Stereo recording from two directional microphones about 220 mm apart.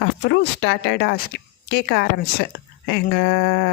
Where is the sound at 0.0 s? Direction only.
50° left (ahead or behind).